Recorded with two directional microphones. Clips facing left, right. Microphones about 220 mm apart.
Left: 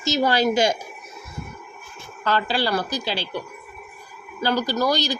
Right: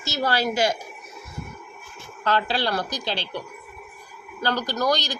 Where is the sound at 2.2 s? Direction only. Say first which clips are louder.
Left 1 dB; centre (ahead or behind).